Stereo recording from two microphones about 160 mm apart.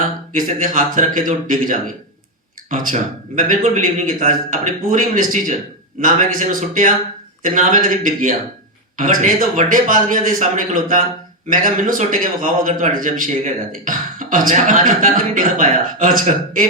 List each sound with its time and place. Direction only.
0.3 s a man's voice: 55° right (ahead or behind)